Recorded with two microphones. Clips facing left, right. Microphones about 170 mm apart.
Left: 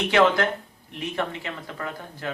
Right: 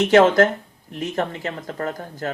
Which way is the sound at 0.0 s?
45° right (ahead or behind).